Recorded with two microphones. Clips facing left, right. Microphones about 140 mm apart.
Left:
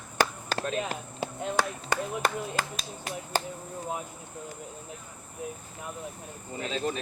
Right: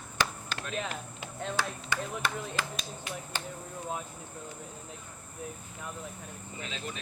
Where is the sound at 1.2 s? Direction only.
35° left (ahead or behind).